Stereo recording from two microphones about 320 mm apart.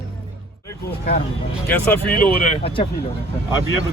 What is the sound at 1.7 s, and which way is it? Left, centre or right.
Speech, centre.